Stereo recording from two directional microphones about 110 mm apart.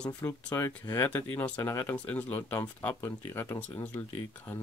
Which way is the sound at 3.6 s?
10° left (ahead or behind).